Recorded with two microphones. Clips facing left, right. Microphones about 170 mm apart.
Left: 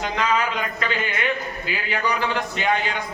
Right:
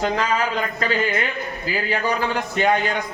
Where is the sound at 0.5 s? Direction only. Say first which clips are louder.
Right 3 dB; 35° right (ahead or behind).